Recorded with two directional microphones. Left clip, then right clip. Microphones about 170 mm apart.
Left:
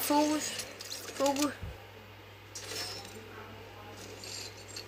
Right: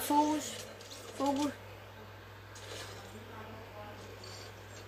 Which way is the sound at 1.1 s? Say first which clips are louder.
Left 3 dB; 65° left (ahead or behind).